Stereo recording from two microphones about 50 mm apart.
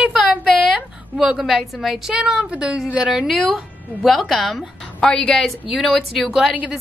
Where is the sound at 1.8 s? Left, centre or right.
Centre.